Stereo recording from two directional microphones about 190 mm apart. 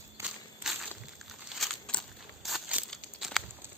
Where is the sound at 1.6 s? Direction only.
5° left (ahead or behind).